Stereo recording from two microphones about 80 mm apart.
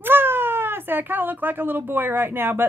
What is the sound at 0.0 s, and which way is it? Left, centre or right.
A woman's voice, right.